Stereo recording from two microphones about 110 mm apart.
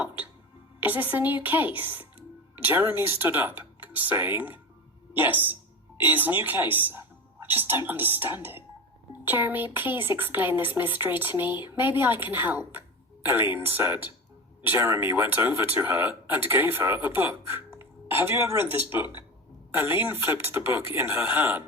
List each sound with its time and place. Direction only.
0.8 s a woman's voice: 15° right (ahead or behind)